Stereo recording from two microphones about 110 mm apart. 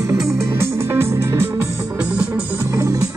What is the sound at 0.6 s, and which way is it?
Music, 25° right (ahead or behind).